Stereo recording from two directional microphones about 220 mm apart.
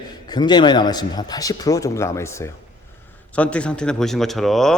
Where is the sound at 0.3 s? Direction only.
20° left (ahead or behind).